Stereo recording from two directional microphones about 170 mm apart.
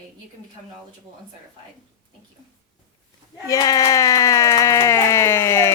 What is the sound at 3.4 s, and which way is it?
A woman's voice, 20° left (ahead or behind).